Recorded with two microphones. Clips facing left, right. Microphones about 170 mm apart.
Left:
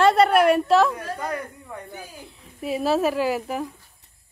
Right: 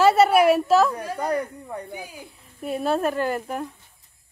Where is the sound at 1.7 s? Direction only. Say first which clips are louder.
Right 4 dB; 35° right (ahead or behind).